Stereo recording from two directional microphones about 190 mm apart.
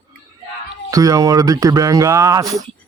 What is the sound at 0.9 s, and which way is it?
Speech, 20° right (ahead or behind).